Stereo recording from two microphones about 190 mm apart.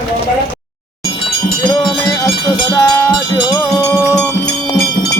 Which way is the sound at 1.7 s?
20° left (ahead or behind).